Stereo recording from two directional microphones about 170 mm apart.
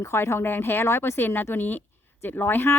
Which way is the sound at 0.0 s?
15° left (ahead or behind).